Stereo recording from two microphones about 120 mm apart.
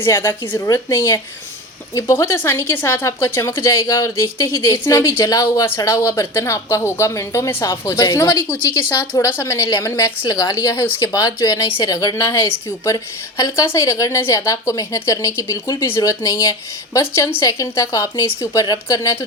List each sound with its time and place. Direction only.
0.0 s a woman's voice: 25° left (ahead or behind)
9.1 s a woman's voice: 25° left (ahead or behind)